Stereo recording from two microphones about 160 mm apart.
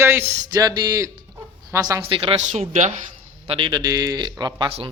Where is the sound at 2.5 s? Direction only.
50° right (ahead or behind).